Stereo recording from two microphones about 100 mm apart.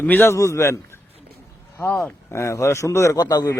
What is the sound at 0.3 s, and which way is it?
Speech, 30° left (ahead or behind).